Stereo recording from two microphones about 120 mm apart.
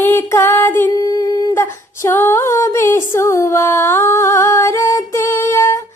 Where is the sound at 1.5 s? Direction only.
20° left (ahead or behind).